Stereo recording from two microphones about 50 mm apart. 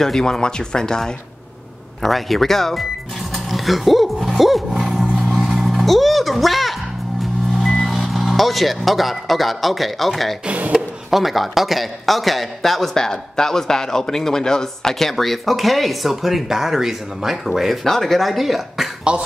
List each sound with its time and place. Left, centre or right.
0.0 s speech: centre
2.0 s a man's voice: centre
3.4 s roaring cats: centre
7.6 s vehicle: centre
8.0 s speech: centre
10.4 s cough: right
11.1 s a man's voice: centre
19.1 s speech: right